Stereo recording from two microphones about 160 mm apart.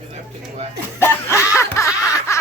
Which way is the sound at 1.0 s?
15° left (ahead or behind).